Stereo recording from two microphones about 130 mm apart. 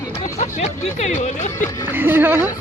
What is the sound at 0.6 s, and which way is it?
Music, 60° left (ahead or behind).